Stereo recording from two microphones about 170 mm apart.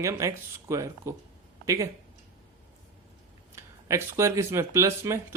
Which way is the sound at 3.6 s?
15° right (ahead or behind).